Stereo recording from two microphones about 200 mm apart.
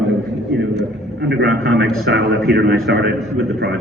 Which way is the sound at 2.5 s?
55° right (ahead or behind).